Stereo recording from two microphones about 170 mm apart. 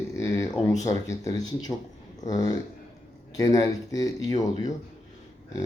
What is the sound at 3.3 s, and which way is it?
Speech, 20° left (ahead or behind).